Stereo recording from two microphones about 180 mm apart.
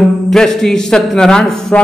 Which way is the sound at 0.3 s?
Centre (ahead or behind).